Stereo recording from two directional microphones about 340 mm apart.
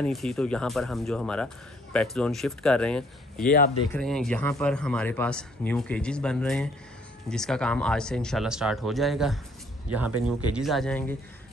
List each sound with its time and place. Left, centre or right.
0.0 s speech: centre
3.4 s speech: left
3.9 s speech: centre